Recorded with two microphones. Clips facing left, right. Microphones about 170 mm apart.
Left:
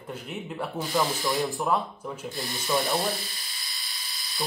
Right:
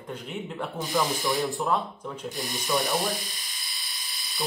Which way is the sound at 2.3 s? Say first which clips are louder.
Even; 15° right (ahead or behind).